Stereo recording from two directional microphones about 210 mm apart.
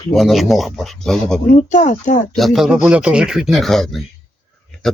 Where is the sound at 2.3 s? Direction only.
Centre (ahead or behind).